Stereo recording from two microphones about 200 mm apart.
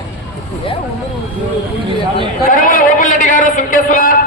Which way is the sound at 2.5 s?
45° left (ahead or behind).